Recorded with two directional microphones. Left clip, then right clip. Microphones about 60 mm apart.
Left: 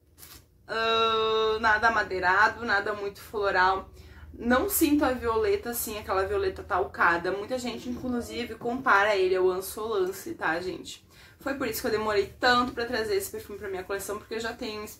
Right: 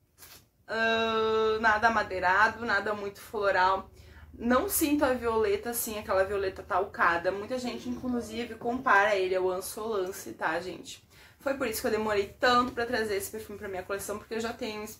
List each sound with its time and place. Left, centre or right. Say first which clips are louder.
0.7 s speech: left 3 dB; centre
4.4 s a woman's voice: left 2 dB; centre
4.8 s a woman's voice: left 2 dB; centre
9.3 s speech: left 4 dB; centre
10.4 s speech: left 2 dB; right